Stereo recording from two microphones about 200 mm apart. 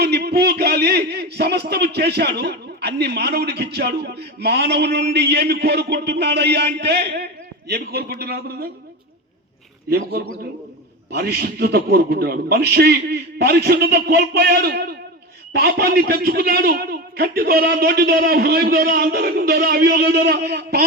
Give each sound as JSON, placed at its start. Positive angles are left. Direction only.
{"t": 0.0, "sound": "a man's voice", "side_deg": -55}
{"t": 9.9, "sound": "a man's voice", "side_deg": -50}